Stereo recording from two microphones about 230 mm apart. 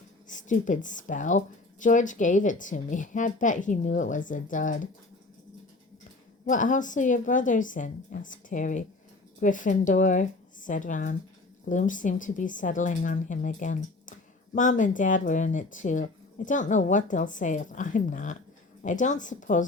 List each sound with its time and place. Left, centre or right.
0.3 s speech: left
6.4 s speech: left